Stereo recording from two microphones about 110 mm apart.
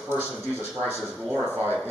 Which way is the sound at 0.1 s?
20° right (ahead or behind).